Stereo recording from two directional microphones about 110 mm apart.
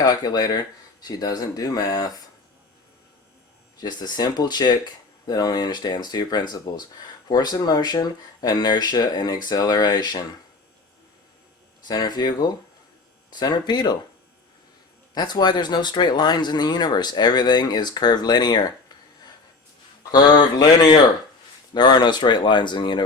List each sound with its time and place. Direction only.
0.0 s speech: 35° left (ahead or behind)
3.8 s speech: 40° left (ahead or behind)
11.9 s speech: 40° left (ahead or behind)
15.1 s speech: 40° left (ahead or behind)